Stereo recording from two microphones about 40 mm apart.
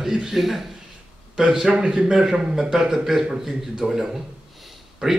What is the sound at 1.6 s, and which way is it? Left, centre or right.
A man's voice, right.